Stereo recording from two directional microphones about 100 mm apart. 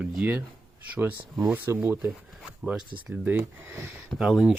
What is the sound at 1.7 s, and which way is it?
Speech, 30° right (ahead or behind).